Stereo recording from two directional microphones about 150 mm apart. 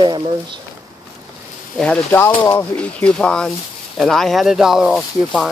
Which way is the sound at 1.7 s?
10° left (ahead or behind).